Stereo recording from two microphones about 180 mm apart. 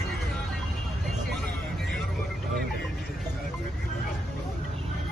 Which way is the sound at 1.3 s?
Centre (ahead or behind).